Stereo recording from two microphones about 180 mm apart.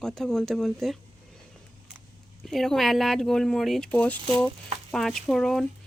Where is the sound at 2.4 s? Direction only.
Centre (ahead or behind).